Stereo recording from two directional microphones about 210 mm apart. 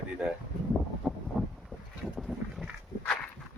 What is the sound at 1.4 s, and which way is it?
Boat, centre (ahead or behind).